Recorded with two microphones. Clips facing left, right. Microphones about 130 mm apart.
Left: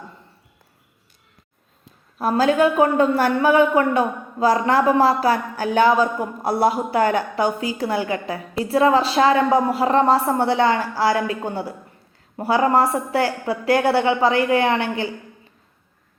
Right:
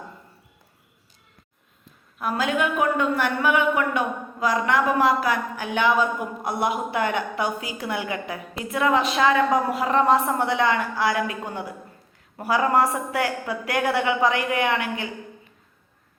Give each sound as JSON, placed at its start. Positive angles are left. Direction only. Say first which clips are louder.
{"t": 2.1, "sound": "a woman's voice", "louder": "left 7 dB", "side_deg": 35}